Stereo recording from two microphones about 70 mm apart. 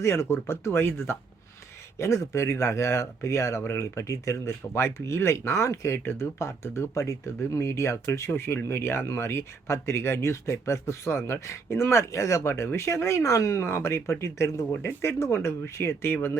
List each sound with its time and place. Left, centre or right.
0.0 s speech: left
13.2 s speech: left
13.7 s speech: left